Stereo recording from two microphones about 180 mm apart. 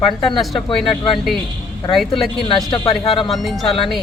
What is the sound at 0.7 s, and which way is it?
Speech, 30° left (ahead or behind).